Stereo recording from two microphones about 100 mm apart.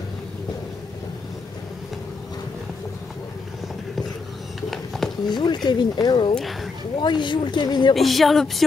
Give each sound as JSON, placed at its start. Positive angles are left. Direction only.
{"t": 4.6, "sound": "a sound", "side_deg": 0}
{"t": 5.2, "sound": "speech", "side_deg": 45}
{"t": 6.3, "sound": "speech", "side_deg": 0}
{"t": 7.0, "sound": "speech", "side_deg": 50}
{"t": 7.9, "sound": "music", "side_deg": 0}